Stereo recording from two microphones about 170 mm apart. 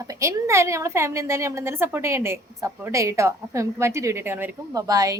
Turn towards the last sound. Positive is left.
turn(degrees=-20)  # may be behind; listen again after turning